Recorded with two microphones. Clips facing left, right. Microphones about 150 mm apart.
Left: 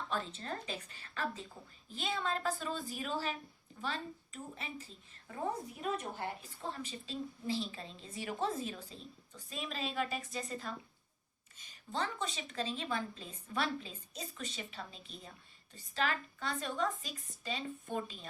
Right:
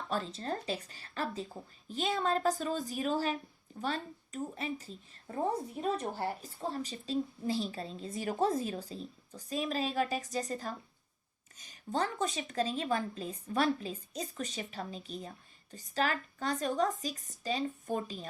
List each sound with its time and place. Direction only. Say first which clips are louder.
0.1 s a woman's voice: right 6 dB; 35° right (ahead or behind)